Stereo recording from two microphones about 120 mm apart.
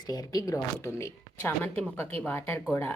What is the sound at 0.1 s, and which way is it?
Speech, 35° left (ahead or behind).